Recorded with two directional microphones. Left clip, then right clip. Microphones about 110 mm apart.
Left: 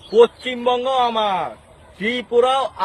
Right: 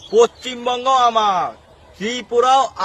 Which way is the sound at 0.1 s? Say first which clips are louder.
Even; 35° right (ahead or behind).